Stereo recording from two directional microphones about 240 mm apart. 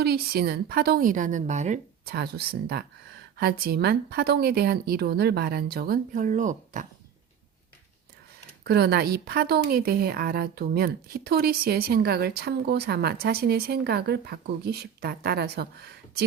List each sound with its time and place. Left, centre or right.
0.0 s a woman's voice: right
2.1 s a woman's voice: right
8.6 s a woman's voice: right